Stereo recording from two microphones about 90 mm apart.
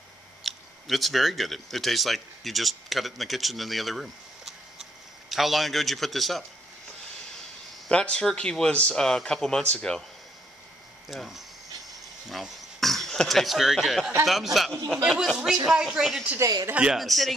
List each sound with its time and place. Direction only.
0.4 s a man's voice: centre (ahead or behind)
7.9 s speech: 10° left (ahead or behind)
11.1 s a man's voice: 5° right (ahead or behind)
16.3 s speech: 40° right (ahead or behind)
16.7 s a man's voice: 10° right (ahead or behind)
17.0 s a man's voice: centre (ahead or behind)